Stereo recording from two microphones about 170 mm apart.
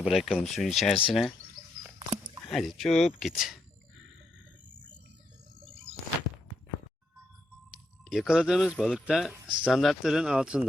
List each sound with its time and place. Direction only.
0.0 s speech: centre (ahead or behind)
2.5 s speech: centre (ahead or behind)
5.6 s a sound: 35° right (ahead or behind)
8.1 s speech: 5° right (ahead or behind)